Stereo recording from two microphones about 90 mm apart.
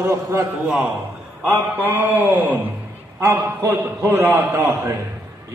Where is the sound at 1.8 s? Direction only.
20° right (ahead or behind).